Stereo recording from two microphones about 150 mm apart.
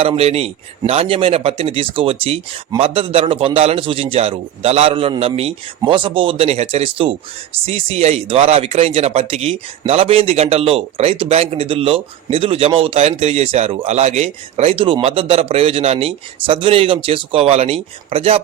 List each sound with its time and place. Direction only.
0.0 s speech: 40° right (ahead or behind)